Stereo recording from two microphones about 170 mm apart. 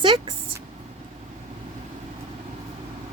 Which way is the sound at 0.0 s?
30° right (ahead or behind).